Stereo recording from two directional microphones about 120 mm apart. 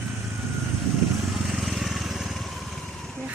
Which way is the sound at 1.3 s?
Centre (ahead or behind).